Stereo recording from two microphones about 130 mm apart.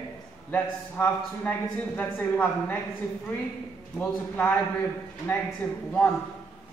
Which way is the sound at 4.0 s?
15° left (ahead or behind).